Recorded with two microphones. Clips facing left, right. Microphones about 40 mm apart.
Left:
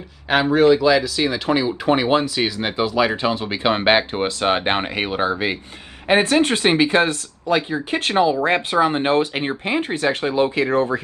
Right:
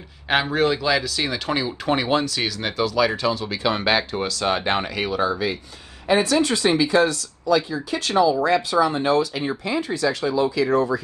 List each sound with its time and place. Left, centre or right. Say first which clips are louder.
0.3 s speech: left 5 dB; centre; by 11.0 s left